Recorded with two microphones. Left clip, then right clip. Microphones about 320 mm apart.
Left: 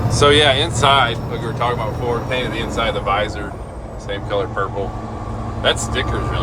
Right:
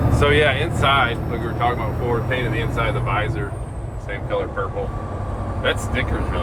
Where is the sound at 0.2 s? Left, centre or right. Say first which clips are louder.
Left 5 dB; centre.